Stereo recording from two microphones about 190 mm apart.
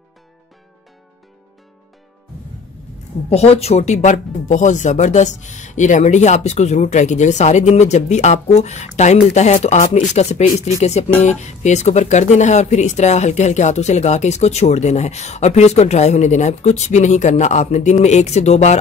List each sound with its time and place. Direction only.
3.3 s speech: 30° left (ahead or behind)